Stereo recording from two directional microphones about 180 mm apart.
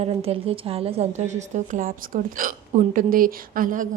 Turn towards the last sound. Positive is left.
turn(degrees=-50)  # may be behind; listen again after turning